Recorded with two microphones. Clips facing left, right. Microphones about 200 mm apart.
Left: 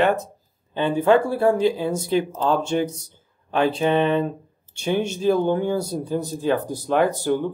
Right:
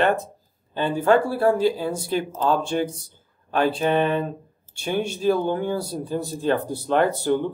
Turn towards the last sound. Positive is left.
turn(degrees=15)  # may be behind; listen again after turning